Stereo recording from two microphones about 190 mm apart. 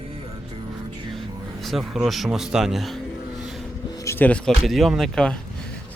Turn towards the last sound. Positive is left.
turn(degrees=5)  # may be behind; listen again after turning